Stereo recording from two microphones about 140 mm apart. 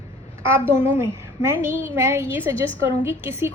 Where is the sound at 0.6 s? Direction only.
15° right (ahead or behind).